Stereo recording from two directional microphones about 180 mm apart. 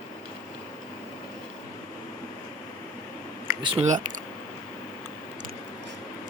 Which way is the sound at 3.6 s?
30° right (ahead or behind).